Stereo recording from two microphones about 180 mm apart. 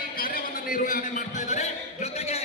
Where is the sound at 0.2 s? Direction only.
50° left (ahead or behind).